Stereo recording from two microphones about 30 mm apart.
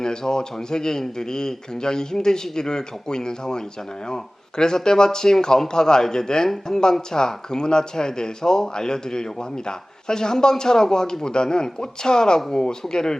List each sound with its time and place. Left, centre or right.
0.0 s speech: left